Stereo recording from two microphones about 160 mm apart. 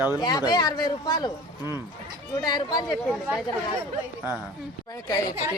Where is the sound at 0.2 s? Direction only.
25° left (ahead or behind).